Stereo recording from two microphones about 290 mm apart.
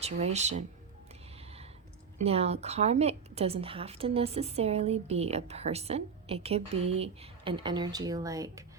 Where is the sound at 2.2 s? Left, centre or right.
Right.